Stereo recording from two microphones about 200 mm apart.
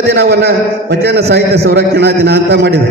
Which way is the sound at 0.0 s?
60° right (ahead or behind).